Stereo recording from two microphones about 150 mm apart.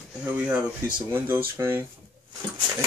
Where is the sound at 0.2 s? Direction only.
10° right (ahead or behind).